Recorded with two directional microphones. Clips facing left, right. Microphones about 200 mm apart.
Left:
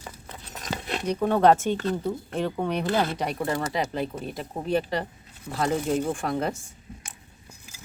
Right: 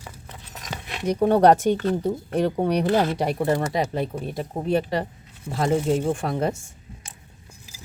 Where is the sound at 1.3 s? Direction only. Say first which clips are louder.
Right 3 dB; 40° right (ahead or behind).